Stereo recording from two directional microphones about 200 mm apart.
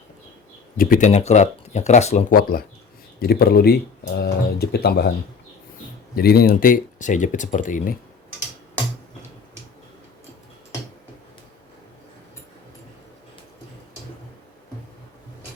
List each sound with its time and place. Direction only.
0.8 s speech: 40° left (ahead or behind)
2.3 s speech: 50° left (ahead or behind)
6.1 s speech: 50° left (ahead or behind)